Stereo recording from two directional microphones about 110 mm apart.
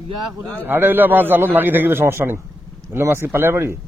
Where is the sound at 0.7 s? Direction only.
20° right (ahead or behind).